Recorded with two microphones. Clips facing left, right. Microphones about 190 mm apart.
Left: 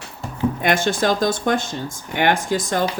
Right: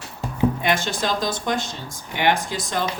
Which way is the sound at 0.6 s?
50° left (ahead or behind).